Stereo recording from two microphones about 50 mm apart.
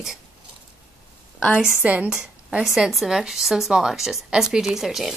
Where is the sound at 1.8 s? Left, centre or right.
Right.